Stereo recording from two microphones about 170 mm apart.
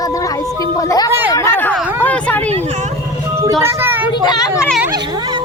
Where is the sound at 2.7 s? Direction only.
45° right (ahead or behind).